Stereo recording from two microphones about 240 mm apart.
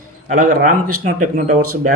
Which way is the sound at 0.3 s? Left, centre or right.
Right.